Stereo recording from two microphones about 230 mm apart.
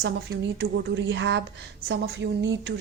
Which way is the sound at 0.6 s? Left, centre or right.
Right.